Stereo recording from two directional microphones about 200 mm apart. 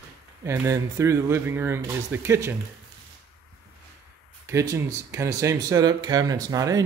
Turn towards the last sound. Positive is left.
turn(degrees=-15)  # may be behind; listen again after turning